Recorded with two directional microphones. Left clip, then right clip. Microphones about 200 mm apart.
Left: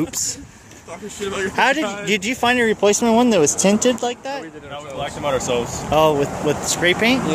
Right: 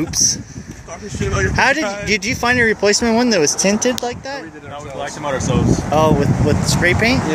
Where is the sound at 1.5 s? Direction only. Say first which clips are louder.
Right 1 dB; 5° left (ahead or behind).